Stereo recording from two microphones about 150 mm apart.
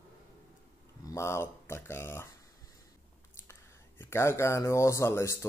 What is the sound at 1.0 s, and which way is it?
Speech, 20° left (ahead or behind).